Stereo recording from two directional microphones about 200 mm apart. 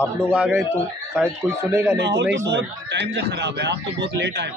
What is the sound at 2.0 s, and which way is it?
A man's voice, 60° right (ahead or behind).